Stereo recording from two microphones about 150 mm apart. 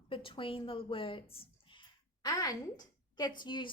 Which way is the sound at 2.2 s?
25° left (ahead or behind).